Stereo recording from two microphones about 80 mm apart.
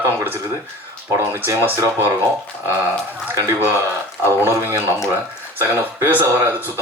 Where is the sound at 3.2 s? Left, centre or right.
Right.